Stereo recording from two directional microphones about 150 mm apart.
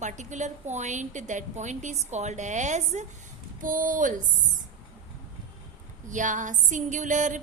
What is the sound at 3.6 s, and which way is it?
Speech, 65° right (ahead or behind).